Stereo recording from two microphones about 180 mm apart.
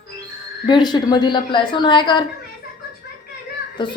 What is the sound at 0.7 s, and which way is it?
A woman's voice, 25° left (ahead or behind).